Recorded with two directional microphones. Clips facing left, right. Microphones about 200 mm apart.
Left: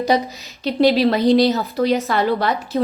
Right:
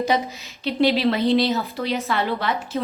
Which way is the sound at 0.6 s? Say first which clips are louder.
Left 4 dB; 40° left (ahead or behind).